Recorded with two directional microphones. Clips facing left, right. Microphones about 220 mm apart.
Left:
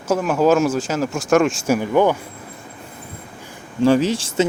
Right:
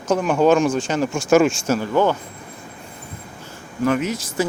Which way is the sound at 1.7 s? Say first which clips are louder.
Left 2 dB; 15° left (ahead or behind).